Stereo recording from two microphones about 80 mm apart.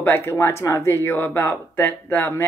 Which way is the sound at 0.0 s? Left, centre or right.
Left.